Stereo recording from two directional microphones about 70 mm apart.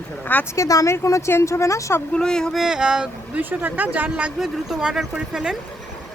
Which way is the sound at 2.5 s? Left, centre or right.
Centre.